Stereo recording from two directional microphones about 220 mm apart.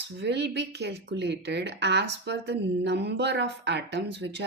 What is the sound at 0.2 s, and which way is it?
Speech, 50° right (ahead or behind).